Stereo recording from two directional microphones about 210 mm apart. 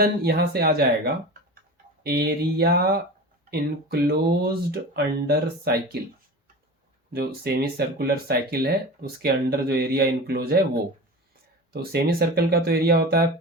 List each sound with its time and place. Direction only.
0.0 s speech: 45° right (ahead or behind)
7.1 s speech: 45° right (ahead or behind)
11.7 s speech: 50° right (ahead or behind)